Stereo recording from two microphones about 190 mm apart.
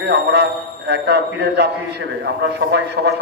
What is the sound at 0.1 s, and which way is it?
A man's voice, 55° right (ahead or behind).